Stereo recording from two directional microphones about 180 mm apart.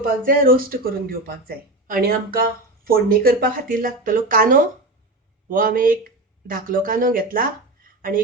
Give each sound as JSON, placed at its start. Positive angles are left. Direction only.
{"t": 0.0, "sound": "speech", "side_deg": -50}